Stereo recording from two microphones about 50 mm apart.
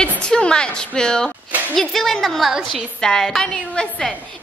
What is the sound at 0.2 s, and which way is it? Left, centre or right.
A child's voice, centre.